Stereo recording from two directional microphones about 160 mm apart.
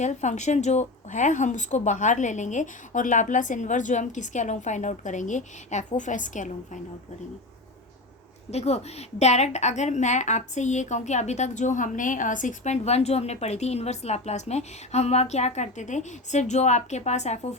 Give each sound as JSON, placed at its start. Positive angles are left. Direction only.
{"t": 0.0, "sound": "a woman's voice", "side_deg": 45}
{"t": 8.4, "sound": "a woman's voice", "side_deg": 40}